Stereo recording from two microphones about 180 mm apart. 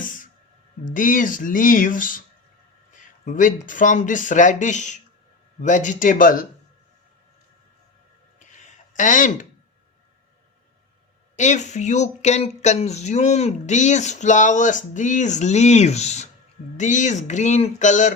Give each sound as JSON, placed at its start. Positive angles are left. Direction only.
{"t": 0.9, "sound": "speech", "side_deg": 45}
{"t": 8.4, "sound": "a sound", "side_deg": 45}
{"t": 11.3, "sound": "speech", "side_deg": 40}